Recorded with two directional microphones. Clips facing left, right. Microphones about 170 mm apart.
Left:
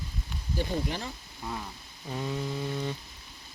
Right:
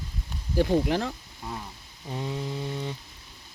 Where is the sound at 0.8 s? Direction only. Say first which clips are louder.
Right 8 dB; 80° right.